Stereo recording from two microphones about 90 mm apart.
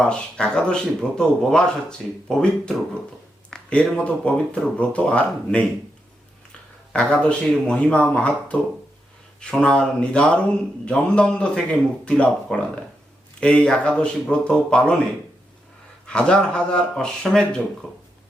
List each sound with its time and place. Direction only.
0.0 s a man's voice: 10° left (ahead or behind)
3.5 s a sound: 15° left (ahead or behind)
3.9 s a man's voice: 15° left (ahead or behind)
6.9 s a man's voice: 10° left (ahead or behind)
16.0 s a man's voice: 10° left (ahead or behind)